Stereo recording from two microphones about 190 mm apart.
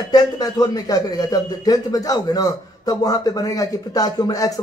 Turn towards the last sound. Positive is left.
turn(degrees=20)  # may be behind; listen again after turning